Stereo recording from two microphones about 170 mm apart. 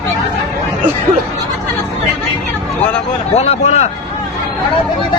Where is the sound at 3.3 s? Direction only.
40° left (ahead or behind).